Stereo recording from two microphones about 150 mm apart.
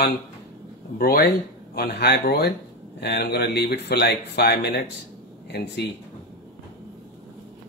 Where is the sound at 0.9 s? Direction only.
80° left.